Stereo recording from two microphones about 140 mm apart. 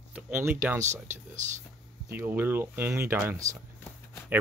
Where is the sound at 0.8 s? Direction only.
60° right (ahead or behind).